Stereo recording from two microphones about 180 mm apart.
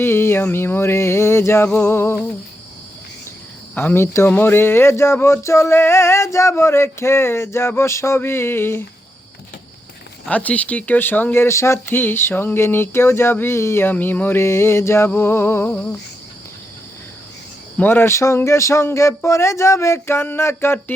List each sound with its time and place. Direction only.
0.0 s speech: 15° left (ahead or behind)
3.8 s speech: 15° left (ahead or behind)
10.2 s speech: 10° left (ahead or behind)
17.7 s speech: 10° left (ahead or behind)